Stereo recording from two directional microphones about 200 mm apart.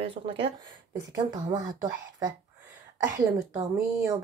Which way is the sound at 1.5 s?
20° right (ahead or behind).